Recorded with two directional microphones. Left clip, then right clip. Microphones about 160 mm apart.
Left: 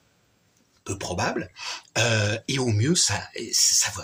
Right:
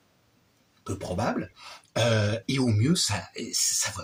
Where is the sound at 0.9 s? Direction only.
20° left (ahead or behind).